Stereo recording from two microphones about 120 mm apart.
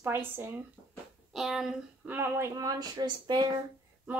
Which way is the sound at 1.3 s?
Centre (ahead or behind).